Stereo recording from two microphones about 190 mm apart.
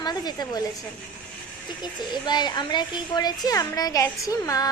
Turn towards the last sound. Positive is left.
turn(degrees=20)  # may be behind; listen again after turning